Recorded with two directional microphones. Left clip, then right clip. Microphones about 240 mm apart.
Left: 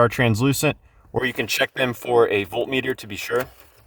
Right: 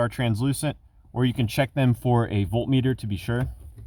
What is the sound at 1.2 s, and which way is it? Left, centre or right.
Speech, left.